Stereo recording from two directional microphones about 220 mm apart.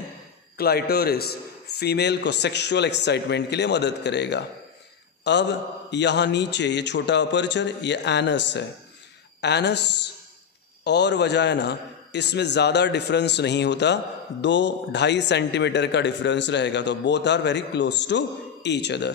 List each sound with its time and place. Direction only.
0.6 s a man's voice: 45° left (ahead or behind)
10.8 s a man's voice: 50° left (ahead or behind)